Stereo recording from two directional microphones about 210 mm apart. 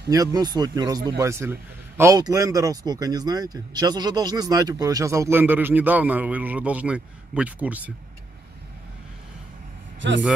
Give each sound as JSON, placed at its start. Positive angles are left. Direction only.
{"t": 0.1, "sound": "a man's voice", "side_deg": -15}
{"t": 10.0, "sound": "a man's voice", "side_deg": -60}